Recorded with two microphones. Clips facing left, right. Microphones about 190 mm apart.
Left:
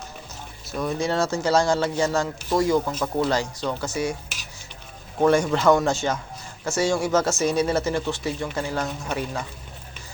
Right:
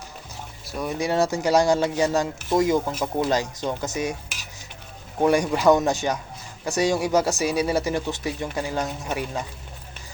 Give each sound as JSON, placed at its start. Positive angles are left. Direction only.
{"t": 0.7, "sound": "speech", "side_deg": -10}
{"t": 5.2, "sound": "speech", "side_deg": -15}